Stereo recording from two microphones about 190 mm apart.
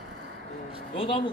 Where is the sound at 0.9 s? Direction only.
25° left (ahead or behind).